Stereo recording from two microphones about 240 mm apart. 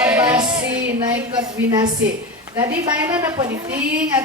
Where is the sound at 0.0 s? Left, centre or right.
Centre.